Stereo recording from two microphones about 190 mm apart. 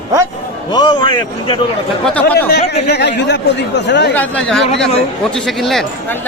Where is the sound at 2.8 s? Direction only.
60° left (ahead or behind).